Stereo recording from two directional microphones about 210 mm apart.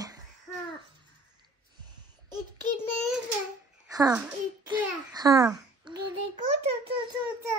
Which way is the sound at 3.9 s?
15° right (ahead or behind).